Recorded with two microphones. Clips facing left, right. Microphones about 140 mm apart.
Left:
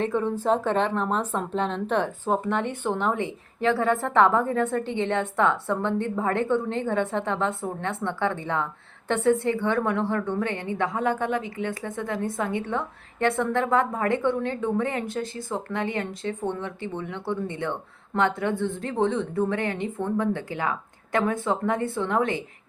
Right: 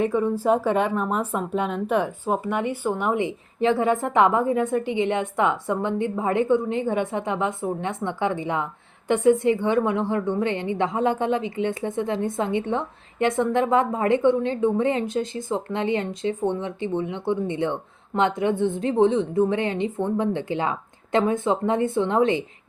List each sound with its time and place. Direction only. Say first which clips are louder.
0.0 s a woman's voice: right 3 dB; 10° right (ahead or behind)